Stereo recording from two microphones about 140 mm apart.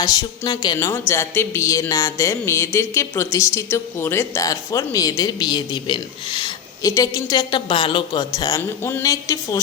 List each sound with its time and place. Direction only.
0.0 s a woman's voice: 25° left (ahead or behind)